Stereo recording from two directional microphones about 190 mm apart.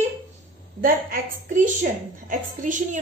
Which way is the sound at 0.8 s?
45° right (ahead or behind).